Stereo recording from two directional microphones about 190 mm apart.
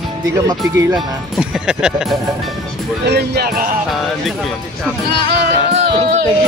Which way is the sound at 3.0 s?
60° right (ahead or behind).